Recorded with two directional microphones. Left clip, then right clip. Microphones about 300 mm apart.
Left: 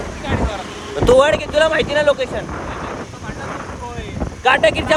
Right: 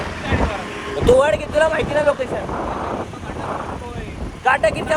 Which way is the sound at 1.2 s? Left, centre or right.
Left.